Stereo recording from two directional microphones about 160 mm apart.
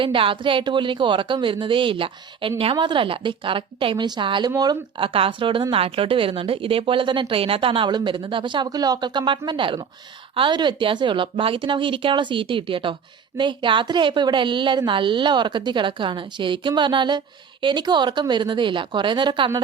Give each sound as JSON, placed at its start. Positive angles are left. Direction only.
{"t": 0.0, "sound": "speech", "side_deg": -35}